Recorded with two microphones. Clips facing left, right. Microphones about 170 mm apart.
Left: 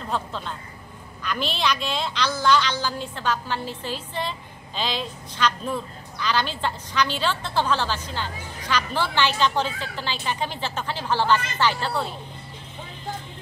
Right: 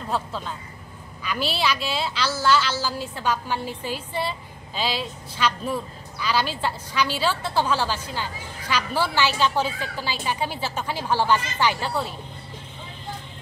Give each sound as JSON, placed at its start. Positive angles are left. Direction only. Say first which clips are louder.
{"t": 0.1, "sound": "a woman's voice", "louder": "right 1 dB", "side_deg": -5}